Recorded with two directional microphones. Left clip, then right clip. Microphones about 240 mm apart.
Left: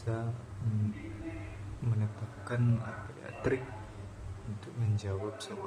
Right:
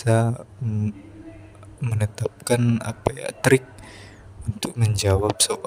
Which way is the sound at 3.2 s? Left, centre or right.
Right.